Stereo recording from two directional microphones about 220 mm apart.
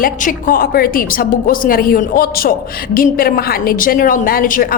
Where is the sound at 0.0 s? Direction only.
40° left (ahead or behind).